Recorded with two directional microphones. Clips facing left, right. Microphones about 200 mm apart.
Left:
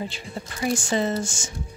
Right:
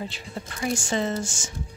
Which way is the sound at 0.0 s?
10° left (ahead or behind).